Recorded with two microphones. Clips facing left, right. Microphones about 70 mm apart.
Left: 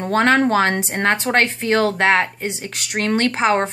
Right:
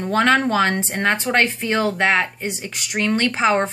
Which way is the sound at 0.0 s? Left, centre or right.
Left.